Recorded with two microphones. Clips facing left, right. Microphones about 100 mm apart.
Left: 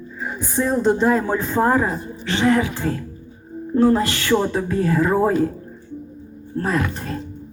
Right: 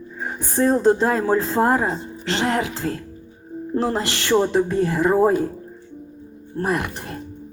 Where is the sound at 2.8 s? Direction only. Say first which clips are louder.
Left 2 dB; 40° left (ahead or behind).